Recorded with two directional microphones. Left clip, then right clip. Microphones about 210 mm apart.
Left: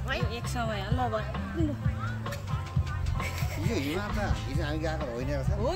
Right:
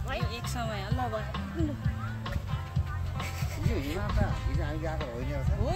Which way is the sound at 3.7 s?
45° left (ahead or behind).